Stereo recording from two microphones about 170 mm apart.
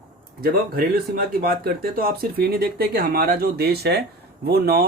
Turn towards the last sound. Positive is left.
turn(degrees=-65)  # may be behind; listen again after turning